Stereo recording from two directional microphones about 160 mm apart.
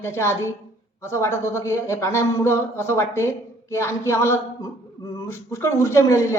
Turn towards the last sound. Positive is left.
turn(degrees=20)  # may be behind; listen again after turning